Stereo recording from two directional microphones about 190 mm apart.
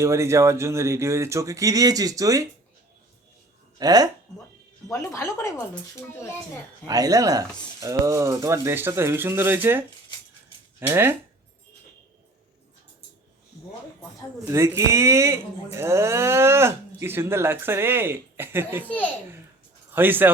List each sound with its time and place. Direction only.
0.0 s speech: 15° right (ahead or behind)
3.8 s speech: 20° right (ahead or behind)
4.9 s speech: 15° left (ahead or behind)
6.8 s speech: 20° right (ahead or behind)
14.4 s speech: 15° right (ahead or behind)
18.9 s speech: 10° left (ahead or behind)
19.9 s speech: 10° right (ahead or behind)